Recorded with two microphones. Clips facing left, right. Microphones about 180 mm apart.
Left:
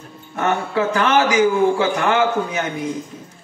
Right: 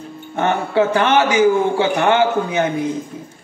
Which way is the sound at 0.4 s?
30° right (ahead or behind).